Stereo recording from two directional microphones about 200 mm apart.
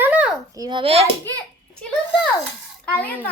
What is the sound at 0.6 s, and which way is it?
Speech, 25° right (ahead or behind).